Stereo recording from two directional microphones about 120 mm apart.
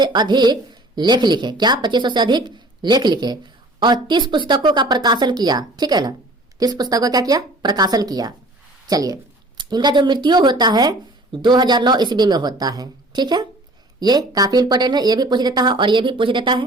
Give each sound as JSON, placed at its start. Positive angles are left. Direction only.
{"t": 0.0, "sound": "speech", "side_deg": -35}